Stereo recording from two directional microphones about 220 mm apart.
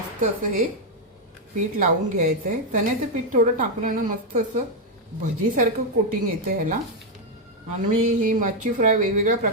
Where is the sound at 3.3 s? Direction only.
35° right (ahead or behind).